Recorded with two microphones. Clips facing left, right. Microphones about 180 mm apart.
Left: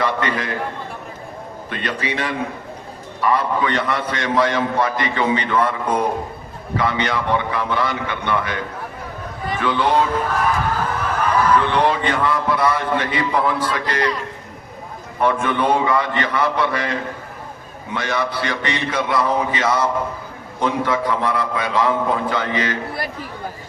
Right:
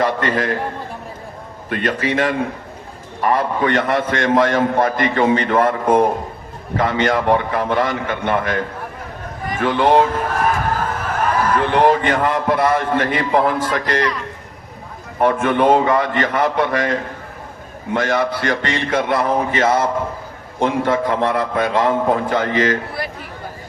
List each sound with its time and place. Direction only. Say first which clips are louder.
0.0 s a man's voice: right 3 dB; 45° right (ahead or behind)
1.7 s a man's voice: right 6 dB; 45° right (ahead or behind)
15.2 s a man's voice: right 4 dB; 45° right (ahead or behind)